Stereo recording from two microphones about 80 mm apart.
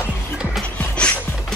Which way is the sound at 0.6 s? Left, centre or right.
Centre.